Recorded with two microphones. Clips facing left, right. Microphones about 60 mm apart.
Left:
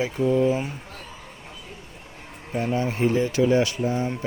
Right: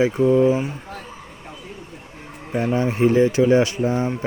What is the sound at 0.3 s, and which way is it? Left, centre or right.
Speech, centre.